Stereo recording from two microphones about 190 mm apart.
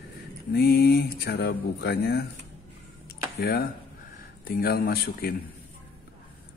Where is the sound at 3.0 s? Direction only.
55° left (ahead or behind).